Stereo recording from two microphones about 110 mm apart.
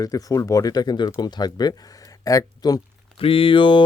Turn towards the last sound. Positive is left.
turn(degrees=50)  # may be behind; listen again after turning